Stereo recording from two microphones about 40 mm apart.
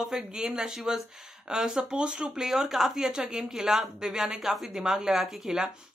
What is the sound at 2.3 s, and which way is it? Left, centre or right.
Speech, centre.